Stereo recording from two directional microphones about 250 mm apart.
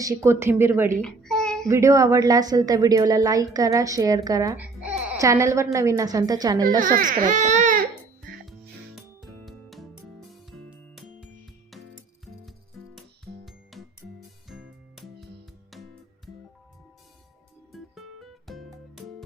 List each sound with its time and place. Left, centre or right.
0.0 s a woman's voice: centre
1.0 s babbling: centre
1.6 s a woman's voice: centre
6.7 s speech: right
9.0 s music: centre
12.9 s music: centre
14.9 s music: centre
17.7 s music: centre